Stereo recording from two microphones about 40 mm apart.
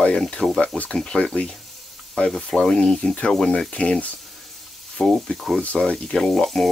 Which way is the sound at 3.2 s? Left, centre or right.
Centre.